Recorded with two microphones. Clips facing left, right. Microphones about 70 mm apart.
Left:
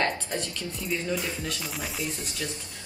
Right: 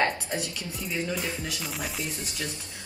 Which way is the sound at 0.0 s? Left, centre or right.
Centre.